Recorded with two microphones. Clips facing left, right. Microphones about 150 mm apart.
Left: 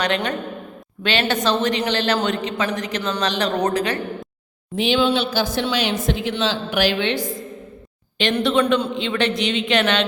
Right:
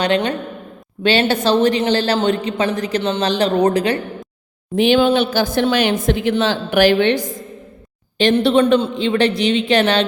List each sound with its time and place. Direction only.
0.0 s a woman's voice: 30° right (ahead or behind)
4.7 s speech: 50° right (ahead or behind)
8.2 s a woman's voice: 35° right (ahead or behind)